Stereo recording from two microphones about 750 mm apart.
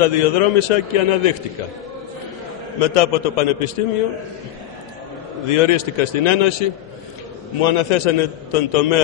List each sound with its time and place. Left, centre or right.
0.0 s a man's voice: left
2.8 s a man's voice: left
5.5 s a man's voice: left
7.6 s a man's voice: left